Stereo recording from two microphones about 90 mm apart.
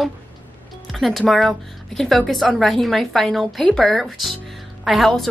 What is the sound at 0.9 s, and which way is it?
Speech, centre (ahead or behind).